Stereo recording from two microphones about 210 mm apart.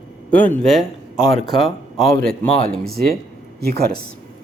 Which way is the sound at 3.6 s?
45° right (ahead or behind).